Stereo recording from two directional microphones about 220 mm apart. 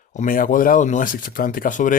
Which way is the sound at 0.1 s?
35° left (ahead or behind).